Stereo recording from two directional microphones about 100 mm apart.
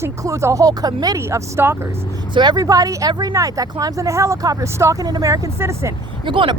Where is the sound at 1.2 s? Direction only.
30° right (ahead or behind).